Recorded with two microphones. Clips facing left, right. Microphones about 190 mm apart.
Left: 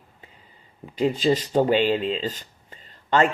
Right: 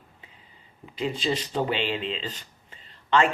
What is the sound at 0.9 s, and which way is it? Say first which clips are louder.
Speech: left 7 dB; 40° left (ahead or behind).